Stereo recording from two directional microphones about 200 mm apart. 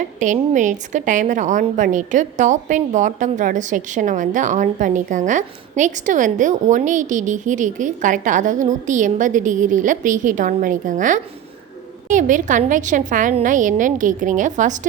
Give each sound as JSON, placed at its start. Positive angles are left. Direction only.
{"t": 0.2, "sound": "a woman's voice", "side_deg": -40}